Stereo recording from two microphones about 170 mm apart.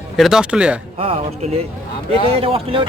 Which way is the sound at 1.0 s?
35° right (ahead or behind).